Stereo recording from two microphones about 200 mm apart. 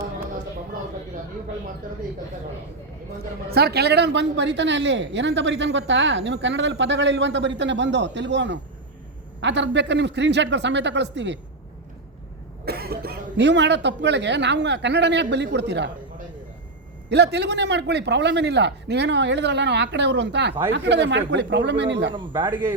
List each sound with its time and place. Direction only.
3.5 s speech: 50° right (ahead or behind)
12.6 s speech: 50° right (ahead or behind)
17.1 s speech: 55° right (ahead or behind)
22.1 s a man's voice: 25° right (ahead or behind)